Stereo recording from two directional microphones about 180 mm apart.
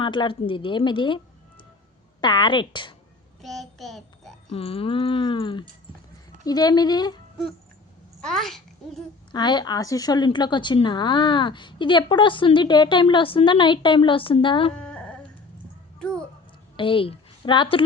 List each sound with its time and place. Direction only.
0.0 s a woman's voice: 25° left (ahead or behind)
3.4 s child singing: centre (ahead or behind)
4.5 s a woman's voice: 30° left (ahead or behind)
8.2 s a child's voice: centre (ahead or behind)
9.3 s a woman's voice: 25° left (ahead or behind)
14.8 s dog: 5° left (ahead or behind)
16.0 s speech: 5° left (ahead or behind)
16.7 s speech: 30° left (ahead or behind)